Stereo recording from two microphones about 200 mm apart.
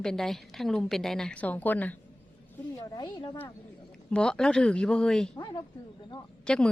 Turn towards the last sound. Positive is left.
turn(degrees=5)  # may be behind; listen again after turning